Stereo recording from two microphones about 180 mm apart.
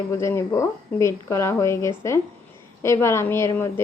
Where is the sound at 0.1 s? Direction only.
15° left (ahead or behind).